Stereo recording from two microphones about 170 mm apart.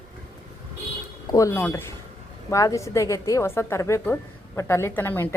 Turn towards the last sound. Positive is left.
turn(degrees=10)  # may be behind; listen again after turning